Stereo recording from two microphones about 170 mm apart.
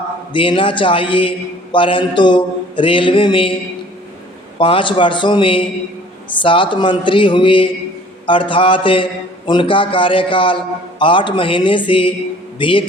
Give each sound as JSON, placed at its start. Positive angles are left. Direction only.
{"t": 0.3, "sound": "a man's voice", "side_deg": 30}
{"t": 4.5, "sound": "a man's voice", "side_deg": 30}